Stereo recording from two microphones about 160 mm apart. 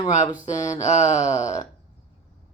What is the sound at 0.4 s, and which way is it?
Speech, 50° left (ahead or behind).